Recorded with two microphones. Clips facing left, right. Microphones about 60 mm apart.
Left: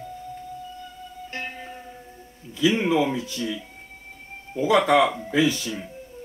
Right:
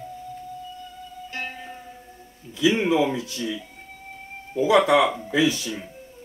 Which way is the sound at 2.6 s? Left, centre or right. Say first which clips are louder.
Right 1 dB; right.